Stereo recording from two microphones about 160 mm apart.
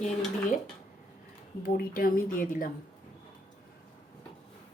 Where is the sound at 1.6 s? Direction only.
65° left (ahead or behind).